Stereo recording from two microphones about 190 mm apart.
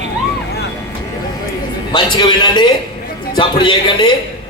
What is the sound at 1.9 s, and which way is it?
A man's voice, 25° left (ahead or behind).